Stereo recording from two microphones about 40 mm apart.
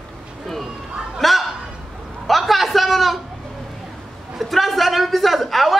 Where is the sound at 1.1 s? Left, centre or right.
Centre.